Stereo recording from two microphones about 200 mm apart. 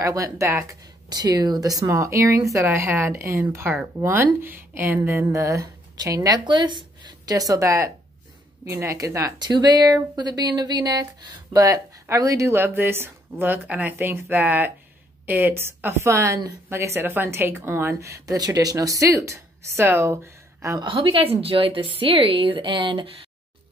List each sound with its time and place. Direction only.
0.0 s a woman's voice: 15° right (ahead or behind)